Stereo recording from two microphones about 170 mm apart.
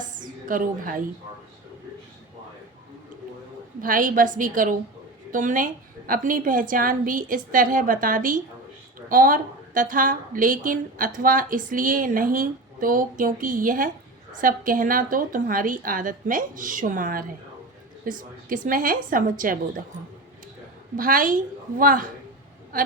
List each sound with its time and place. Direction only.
0.0 s a sound: 50° right (ahead or behind)
3.8 s a woman's voice: 55° right (ahead or behind)
20.9 s a woman's voice: 55° right (ahead or behind)